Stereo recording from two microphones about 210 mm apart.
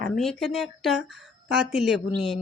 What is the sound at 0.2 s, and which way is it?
Speech, centre (ahead or behind).